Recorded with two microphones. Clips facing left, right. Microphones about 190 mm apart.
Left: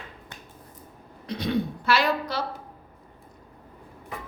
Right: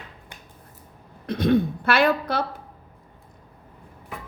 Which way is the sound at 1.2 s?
50° right (ahead or behind).